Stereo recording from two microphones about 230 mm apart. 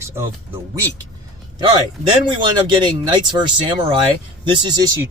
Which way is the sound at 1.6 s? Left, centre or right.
Centre.